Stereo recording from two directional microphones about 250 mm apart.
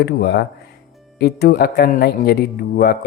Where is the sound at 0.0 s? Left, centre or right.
Left.